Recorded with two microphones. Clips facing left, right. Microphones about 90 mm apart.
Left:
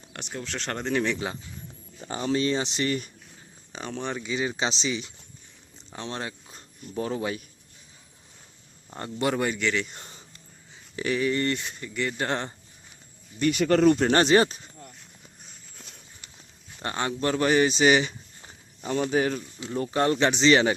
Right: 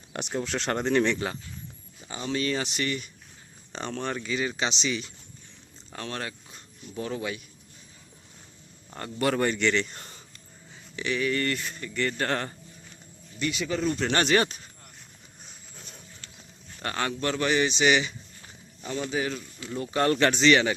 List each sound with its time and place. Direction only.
0.1 s speech: 15° right (ahead or behind)
0.5 s speech: 5° right (ahead or behind); by 1.4 s 10° left (ahead or behind)
2.0 s speech: 40° left (ahead or behind)
3.7 s speech: 5° left (ahead or behind); by 7.4 s 30° left (ahead or behind)
9.0 s speech: 20° left (ahead or behind)
9.3 s a man's voice: 5° left (ahead or behind)
9.9 s a sound: 20° left (ahead or behind)
10.9 s speech: 35° left (ahead or behind); by 12.5 s 20° left (ahead or behind)
13.4 s speech: 55° left (ahead or behind)
14.0 s speech: 35° left (ahead or behind)
16.8 s speech: 25° left (ahead or behind); by 19.5 s 40° left (ahead or behind)
19.5 s speech: 25° left (ahead or behind)
20.5 s speech: 30° left (ahead or behind)